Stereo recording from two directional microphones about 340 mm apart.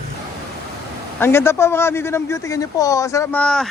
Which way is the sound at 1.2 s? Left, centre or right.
Centre.